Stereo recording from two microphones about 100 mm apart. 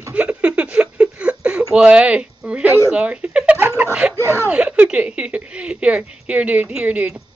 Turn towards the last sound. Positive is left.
turn(degrees=-15)  # may be behind; listen again after turning